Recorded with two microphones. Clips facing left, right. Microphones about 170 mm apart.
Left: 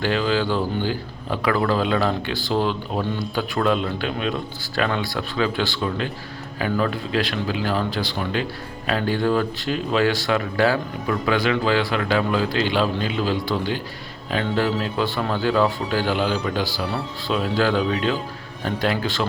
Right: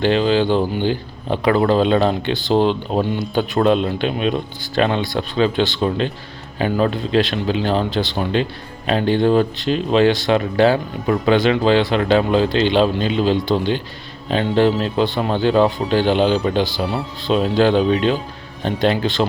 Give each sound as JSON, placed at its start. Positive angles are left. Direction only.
{"t": 0.0, "sound": "speech", "side_deg": -20}